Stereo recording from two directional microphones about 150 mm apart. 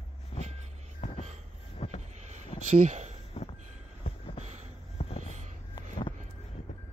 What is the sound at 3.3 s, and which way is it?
Train, 45° left (ahead or behind).